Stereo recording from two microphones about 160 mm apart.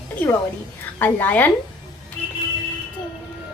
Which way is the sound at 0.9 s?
10° left (ahead or behind).